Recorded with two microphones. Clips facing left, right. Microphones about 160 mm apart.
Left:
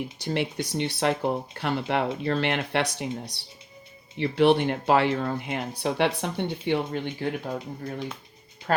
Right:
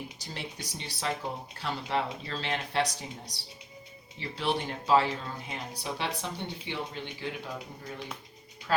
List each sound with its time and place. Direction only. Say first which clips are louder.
0.2 s speech: left 13 dB; 65° left (ahead or behind)